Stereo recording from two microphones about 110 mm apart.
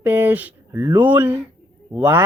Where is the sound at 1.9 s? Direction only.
20° right (ahead or behind).